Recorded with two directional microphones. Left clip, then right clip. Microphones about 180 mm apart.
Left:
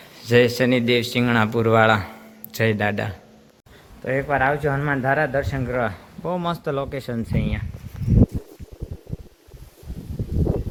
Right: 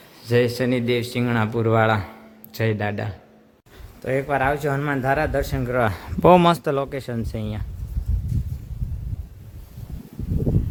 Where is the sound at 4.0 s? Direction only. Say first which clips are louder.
Left 1 dB; 20° right (ahead or behind).